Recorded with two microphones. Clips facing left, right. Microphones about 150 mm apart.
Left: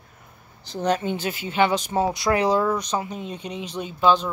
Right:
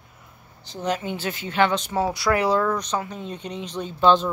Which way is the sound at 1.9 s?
20° left (ahead or behind).